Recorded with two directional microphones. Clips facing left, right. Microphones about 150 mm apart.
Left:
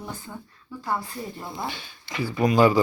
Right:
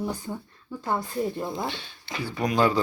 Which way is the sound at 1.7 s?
5° left (ahead or behind).